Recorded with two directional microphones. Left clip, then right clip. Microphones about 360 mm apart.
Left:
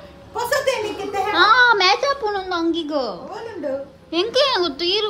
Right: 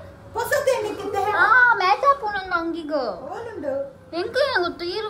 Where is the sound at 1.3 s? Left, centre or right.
Right.